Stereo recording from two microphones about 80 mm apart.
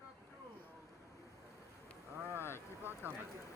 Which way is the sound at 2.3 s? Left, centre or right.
Left.